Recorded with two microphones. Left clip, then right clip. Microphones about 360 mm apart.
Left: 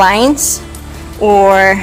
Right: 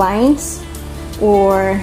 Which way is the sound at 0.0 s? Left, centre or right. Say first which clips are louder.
Left 5 dB; left.